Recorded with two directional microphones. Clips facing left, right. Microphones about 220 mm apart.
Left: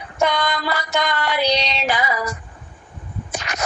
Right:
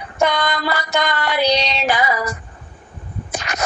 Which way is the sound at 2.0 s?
65° right (ahead or behind).